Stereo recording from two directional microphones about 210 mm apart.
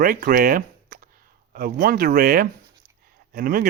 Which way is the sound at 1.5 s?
45° right (ahead or behind).